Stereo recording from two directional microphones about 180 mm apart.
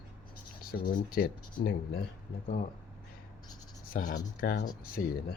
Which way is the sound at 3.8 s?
50° left (ahead or behind).